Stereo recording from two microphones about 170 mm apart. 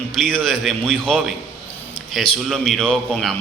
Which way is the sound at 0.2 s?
5° left (ahead or behind).